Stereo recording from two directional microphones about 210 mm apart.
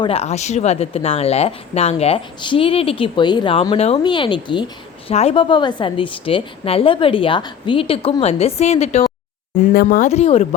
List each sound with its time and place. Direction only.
0.0 s speech: 30° left (ahead or behind)